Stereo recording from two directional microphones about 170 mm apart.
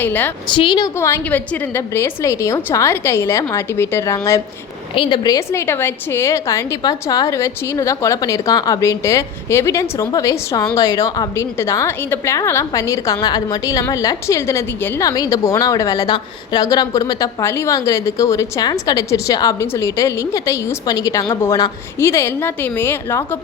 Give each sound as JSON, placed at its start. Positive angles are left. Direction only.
{"t": 0.0, "sound": "a woman's voice", "side_deg": 10}
{"t": 0.4, "sound": "a woman's voice", "side_deg": 30}
{"t": 0.9, "sound": "a woman's voice", "side_deg": 15}